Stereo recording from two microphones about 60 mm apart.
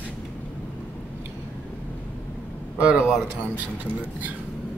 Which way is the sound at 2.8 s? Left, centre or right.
Right.